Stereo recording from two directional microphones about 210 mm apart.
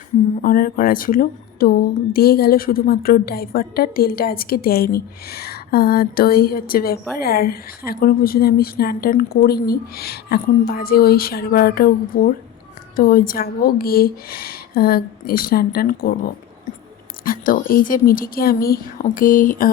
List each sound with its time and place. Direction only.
0.4 s a woman's voice: 45° left (ahead or behind)